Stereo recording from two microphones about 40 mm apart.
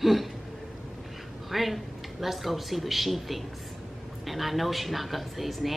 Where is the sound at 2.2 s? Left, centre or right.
Centre.